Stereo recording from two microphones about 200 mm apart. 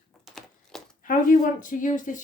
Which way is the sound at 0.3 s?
Centre (ahead or behind).